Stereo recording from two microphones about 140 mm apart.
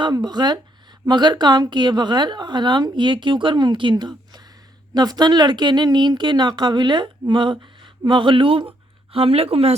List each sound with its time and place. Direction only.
0.0 s speech: 30° right (ahead or behind)